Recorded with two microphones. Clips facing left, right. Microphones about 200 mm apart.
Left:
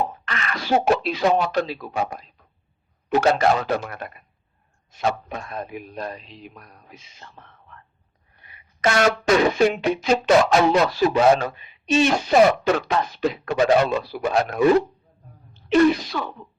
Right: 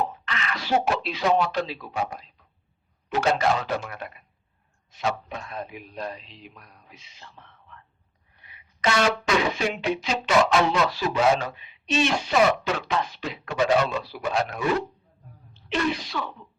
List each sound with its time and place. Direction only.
0.1 s speech: 50° left (ahead or behind)